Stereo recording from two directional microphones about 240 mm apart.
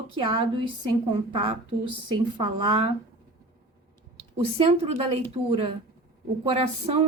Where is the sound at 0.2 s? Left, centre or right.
Right.